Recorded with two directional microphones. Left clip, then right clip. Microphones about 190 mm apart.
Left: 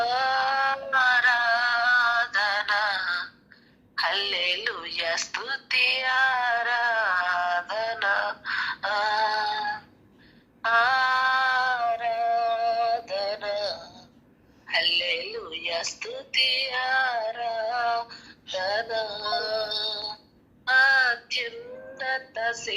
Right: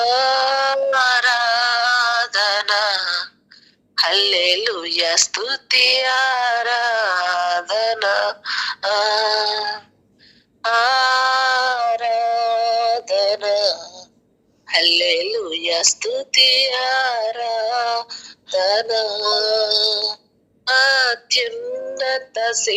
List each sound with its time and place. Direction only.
0.0 s music: 60° right (ahead or behind)
3.9 s a sound: 60° right (ahead or behind)
20.7 s female singing: 60° right (ahead or behind)
21.9 s music: 60° right (ahead or behind)